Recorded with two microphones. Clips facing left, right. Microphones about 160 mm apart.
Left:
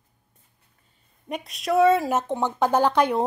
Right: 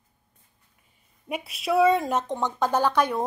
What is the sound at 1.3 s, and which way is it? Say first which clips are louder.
Speech: left 1 dB; 5° right (ahead or behind).